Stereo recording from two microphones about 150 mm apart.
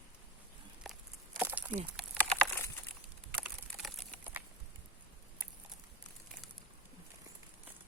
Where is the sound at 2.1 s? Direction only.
10° left (ahead or behind).